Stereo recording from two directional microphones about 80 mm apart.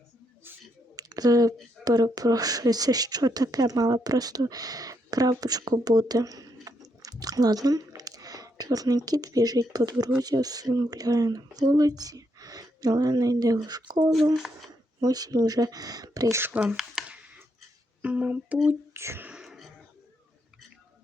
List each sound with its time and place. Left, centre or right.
0.9 s a sound: right
1.8 s speech: right
13.7 s speech: right
15.0 s speech: right
16.3 s speech: right
16.6 s speech: centre
17.1 s a sound: centre
18.7 s speech: right
19.4 s throat clearing: centre